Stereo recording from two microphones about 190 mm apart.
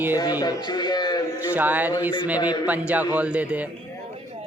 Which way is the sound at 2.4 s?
20° left (ahead or behind).